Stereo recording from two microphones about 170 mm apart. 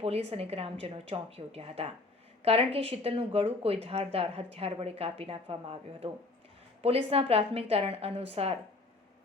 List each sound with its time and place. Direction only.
0.0 s speech: 35° right (ahead or behind)